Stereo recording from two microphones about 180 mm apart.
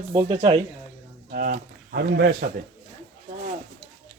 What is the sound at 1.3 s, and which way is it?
Speech, 50° right (ahead or behind).